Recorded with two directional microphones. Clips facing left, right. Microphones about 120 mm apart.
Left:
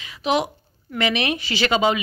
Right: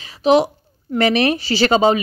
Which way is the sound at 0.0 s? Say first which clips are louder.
Right 8 dB; 35° right (ahead or behind).